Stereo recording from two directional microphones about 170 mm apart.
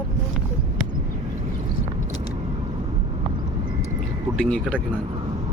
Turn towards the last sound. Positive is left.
turn(degrees=5)  # may be behind; listen again after turning